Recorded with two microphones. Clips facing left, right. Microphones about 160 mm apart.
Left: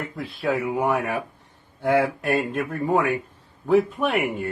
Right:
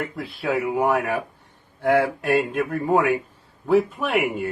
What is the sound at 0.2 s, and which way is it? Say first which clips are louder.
Speech: left 1 dB; centre (ahead or behind).